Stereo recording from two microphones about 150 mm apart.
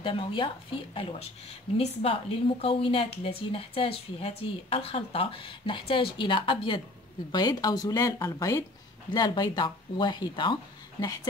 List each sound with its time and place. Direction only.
0.0 s speech: 35° left (ahead or behind)